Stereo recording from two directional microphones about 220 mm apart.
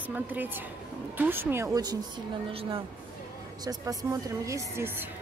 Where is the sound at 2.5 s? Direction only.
25° right (ahead or behind).